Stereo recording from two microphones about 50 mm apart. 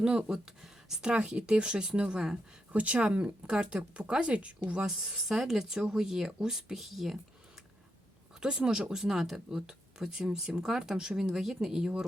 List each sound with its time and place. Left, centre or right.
0.0 s speech: centre
4.8 s speech: centre
8.4 s speech: centre